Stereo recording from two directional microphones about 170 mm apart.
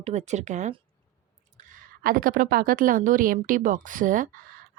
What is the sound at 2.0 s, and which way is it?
A woman's voice, 55° right (ahead or behind).